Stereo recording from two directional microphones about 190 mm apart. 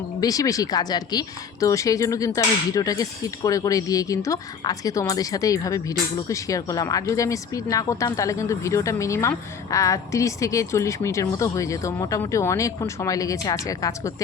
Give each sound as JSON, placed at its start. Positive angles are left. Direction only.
{"t": 0.2, "sound": "speech", "side_deg": 20}